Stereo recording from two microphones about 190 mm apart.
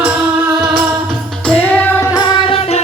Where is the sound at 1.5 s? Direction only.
5° left (ahead or behind).